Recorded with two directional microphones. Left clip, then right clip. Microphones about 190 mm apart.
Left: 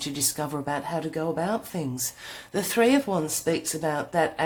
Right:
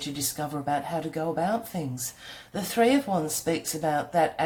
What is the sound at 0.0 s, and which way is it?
Speech, 35° left (ahead or behind).